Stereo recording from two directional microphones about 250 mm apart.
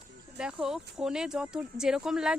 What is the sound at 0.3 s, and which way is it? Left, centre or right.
Speech, centre.